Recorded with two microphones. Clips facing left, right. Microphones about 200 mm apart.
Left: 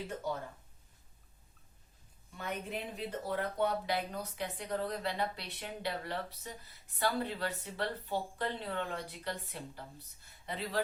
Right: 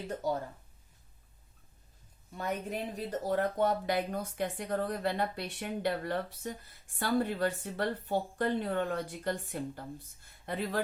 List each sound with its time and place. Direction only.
2.4 s speech: 40° right (ahead or behind)